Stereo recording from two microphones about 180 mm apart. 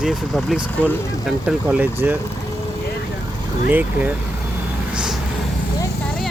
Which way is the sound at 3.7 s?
10° right (ahead or behind).